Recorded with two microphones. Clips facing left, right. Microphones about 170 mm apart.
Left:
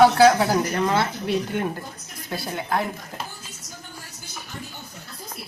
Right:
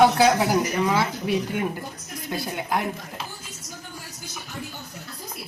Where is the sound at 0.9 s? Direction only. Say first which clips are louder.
Even; 10° right (ahead or behind).